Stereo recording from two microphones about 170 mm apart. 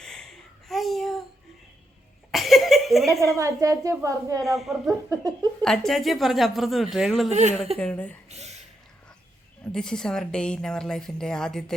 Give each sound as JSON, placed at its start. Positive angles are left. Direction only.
{"t": 0.0, "sound": "a sound", "side_deg": 5}
{"t": 2.3, "sound": "a sound", "side_deg": 0}
{"t": 3.3, "sound": "a woman's voice", "side_deg": -20}
{"t": 4.4, "sound": "a woman's voice", "side_deg": 0}
{"t": 5.0, "sound": "a woman's voice", "side_deg": -20}
{"t": 5.6, "sound": "a woman's voice", "side_deg": 0}
{"t": 7.3, "sound": "speech", "side_deg": -40}
{"t": 7.8, "sound": "speech", "side_deg": 10}
{"t": 8.3, "sound": "a sound", "side_deg": -40}
{"t": 9.7, "sound": "a woman's voice", "side_deg": 5}